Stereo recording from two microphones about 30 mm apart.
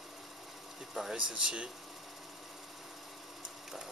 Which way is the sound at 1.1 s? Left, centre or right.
Right.